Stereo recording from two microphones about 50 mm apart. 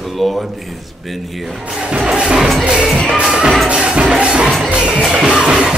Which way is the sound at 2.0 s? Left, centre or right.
Centre.